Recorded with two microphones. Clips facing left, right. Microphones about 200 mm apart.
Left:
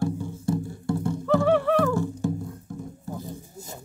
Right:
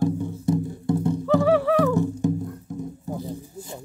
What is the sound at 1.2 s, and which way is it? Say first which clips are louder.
Music: right 1 dB; centre (ahead or behind).